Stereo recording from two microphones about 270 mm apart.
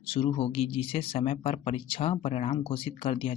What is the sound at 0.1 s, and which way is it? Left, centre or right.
Speech, left.